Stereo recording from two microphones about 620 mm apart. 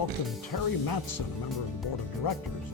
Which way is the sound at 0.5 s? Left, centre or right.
Left.